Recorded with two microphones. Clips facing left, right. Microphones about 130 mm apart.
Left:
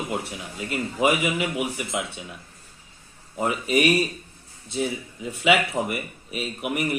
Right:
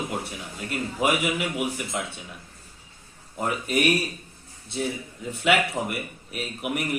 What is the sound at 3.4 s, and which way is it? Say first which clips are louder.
Speech: left 3 dB; centre (ahead or behind).